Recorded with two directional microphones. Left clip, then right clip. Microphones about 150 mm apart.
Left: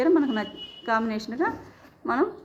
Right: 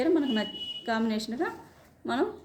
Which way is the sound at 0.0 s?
20° right (ahead or behind).